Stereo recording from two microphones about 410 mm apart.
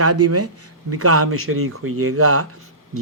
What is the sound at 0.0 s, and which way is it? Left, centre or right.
Speech, right.